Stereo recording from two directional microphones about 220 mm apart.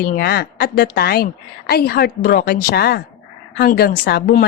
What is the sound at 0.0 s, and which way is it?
Speech, 45° left (ahead or behind).